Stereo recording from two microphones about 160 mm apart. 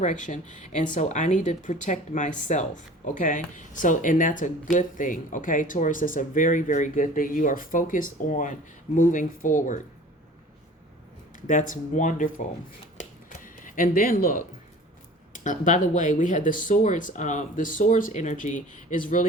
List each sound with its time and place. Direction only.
0.0 s speech: 50° left (ahead or behind)
11.4 s speech: 55° left (ahead or behind)
13.0 s a sound: 55° left (ahead or behind)
15.3 s speech: 50° left (ahead or behind)